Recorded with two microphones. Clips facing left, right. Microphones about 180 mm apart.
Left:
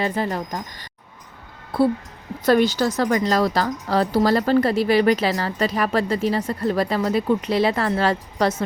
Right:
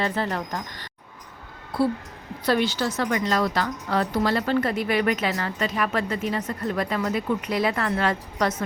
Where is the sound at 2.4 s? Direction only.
45° left (ahead or behind).